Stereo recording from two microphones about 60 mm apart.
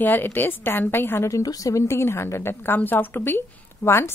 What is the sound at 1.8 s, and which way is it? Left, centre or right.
A woman's voice, left.